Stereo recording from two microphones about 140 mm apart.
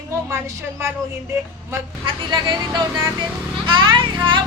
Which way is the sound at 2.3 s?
30° right (ahead or behind).